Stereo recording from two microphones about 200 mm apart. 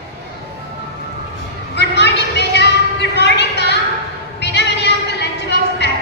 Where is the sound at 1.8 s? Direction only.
60° left (ahead or behind).